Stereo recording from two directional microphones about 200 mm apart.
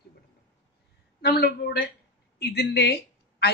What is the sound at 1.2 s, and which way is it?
A woman's voice, 50° left (ahead or behind).